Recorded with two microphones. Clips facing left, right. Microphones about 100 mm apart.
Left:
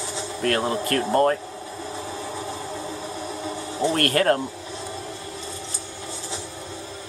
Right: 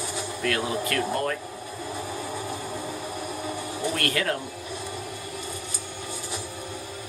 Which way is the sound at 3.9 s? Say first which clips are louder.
Left 8 dB; 45° left (ahead or behind).